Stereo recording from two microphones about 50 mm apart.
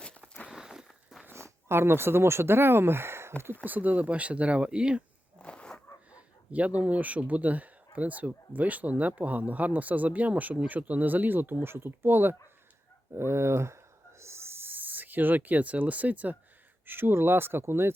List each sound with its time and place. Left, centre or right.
0.0 s walk: centre
0.5 s walk: centre
1.3 s speech: right
3.6 s speech: right
5.4 s a sound: left
6.1 s speech: right
13.1 s speech: right
16.8 s speech: right